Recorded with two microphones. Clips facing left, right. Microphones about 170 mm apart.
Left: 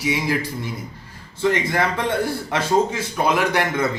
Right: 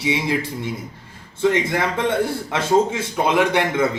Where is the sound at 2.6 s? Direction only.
25° right (ahead or behind).